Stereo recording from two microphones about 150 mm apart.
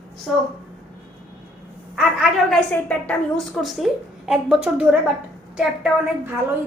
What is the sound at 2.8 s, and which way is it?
A woman's voice, 5° left (ahead or behind).